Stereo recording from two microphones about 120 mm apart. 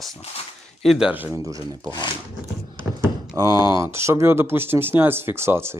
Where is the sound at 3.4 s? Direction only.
30° right (ahead or behind).